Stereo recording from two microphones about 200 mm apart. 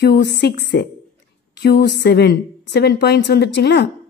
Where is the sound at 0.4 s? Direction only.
55° left (ahead or behind).